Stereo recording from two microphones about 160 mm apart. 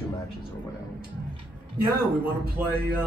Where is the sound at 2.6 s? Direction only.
10° right (ahead or behind).